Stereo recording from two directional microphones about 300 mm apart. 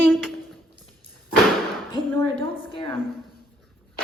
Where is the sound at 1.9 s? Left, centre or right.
Centre.